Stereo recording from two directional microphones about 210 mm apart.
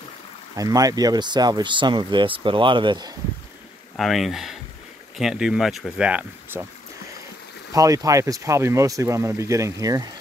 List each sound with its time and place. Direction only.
0.6 s speech: 15° right (ahead or behind)
3.9 s speech: centre (ahead or behind)
7.7 s speech: 15° right (ahead or behind)